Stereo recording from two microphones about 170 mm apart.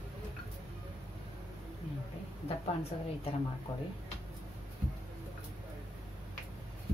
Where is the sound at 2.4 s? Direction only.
35° left (ahead or behind).